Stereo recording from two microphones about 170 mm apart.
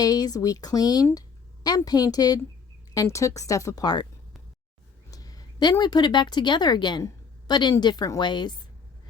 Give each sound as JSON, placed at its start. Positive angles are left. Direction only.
{"t": 0.0, "sound": "a woman's voice", "side_deg": 20}
{"t": 5.1, "sound": "a sound", "side_deg": 20}
{"t": 5.8, "sound": "a woman's voice", "side_deg": 25}